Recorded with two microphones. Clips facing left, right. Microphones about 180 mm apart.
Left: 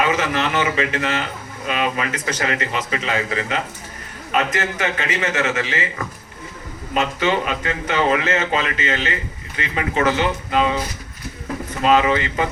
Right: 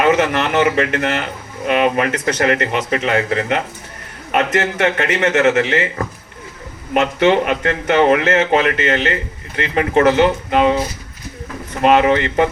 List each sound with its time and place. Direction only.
0.0 s speech: 60° right (ahead or behind)
11.8 s speech: 60° right (ahead or behind)